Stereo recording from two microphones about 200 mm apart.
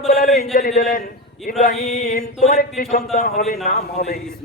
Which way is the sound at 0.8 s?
45° left (ahead or behind).